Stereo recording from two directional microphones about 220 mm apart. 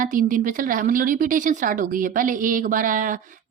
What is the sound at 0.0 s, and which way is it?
A woman's voice, 35° right (ahead or behind).